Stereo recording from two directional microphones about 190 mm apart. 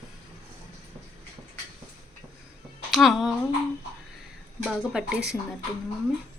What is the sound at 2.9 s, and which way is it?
Speech, centre (ahead or behind).